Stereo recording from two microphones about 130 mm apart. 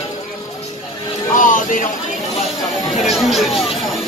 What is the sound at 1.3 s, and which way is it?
Speech, 90° left.